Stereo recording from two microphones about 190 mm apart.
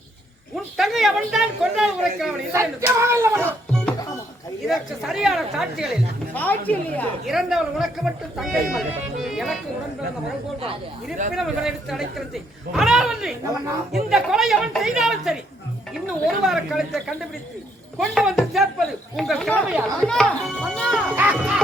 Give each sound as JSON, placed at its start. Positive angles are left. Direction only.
{"t": 0.5, "sound": "a man's voice", "side_deg": 0}
{"t": 2.5, "sound": "a sound", "side_deg": -15}
{"t": 3.4, "sound": "music", "side_deg": 5}
{"t": 4.6, "sound": "a man's voice", "side_deg": 0}
{"t": 6.3, "sound": "a woman's voice", "side_deg": 10}
{"t": 11.3, "sound": "a man's voice", "side_deg": 0}
{"t": 16.5, "sound": "a man's voice", "side_deg": 0}
{"t": 21.1, "sound": "a sound", "side_deg": -10}